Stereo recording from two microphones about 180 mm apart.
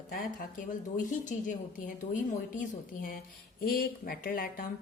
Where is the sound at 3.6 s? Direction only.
55° left (ahead or behind).